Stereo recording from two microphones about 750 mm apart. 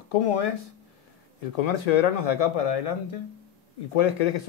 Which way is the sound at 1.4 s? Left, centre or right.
Left.